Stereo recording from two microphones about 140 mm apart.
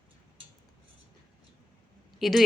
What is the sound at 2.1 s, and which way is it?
Speech, centre (ahead or behind).